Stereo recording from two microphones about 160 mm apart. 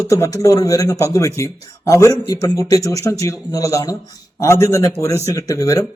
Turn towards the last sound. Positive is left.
turn(degrees=20)  # may be behind; listen again after turning